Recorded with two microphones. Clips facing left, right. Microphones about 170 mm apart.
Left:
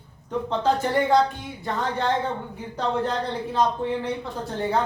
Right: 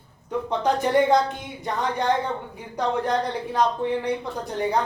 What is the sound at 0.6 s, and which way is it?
A woman's voice, 20° right (ahead or behind).